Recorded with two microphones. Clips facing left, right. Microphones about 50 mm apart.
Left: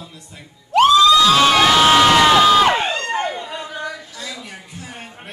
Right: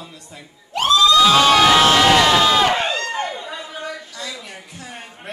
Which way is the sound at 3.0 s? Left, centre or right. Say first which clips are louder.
Left 2 dB; left.